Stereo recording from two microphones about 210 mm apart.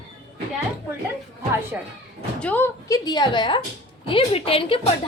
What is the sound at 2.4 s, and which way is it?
A woman's voice, 5° left (ahead or behind).